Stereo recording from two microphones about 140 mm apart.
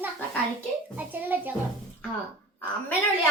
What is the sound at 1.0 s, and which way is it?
Child singing, 15° right (ahead or behind).